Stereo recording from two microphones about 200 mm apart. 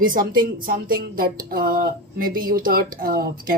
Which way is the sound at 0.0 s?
45° right (ahead or behind).